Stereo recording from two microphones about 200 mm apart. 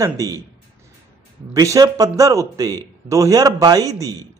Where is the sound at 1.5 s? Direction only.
15° right (ahead or behind).